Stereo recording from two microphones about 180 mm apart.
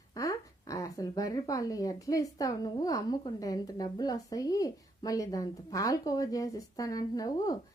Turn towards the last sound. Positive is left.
turn(degrees=20)  # may be behind; listen again after turning